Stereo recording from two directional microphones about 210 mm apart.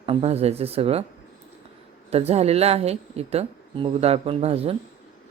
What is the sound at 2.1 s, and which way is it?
Speech, 30° right (ahead or behind).